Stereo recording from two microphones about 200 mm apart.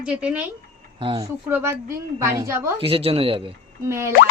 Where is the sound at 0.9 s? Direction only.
25° right (ahead or behind).